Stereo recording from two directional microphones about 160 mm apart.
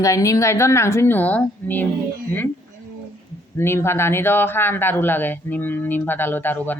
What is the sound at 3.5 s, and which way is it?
Speech, 15° left (ahead or behind).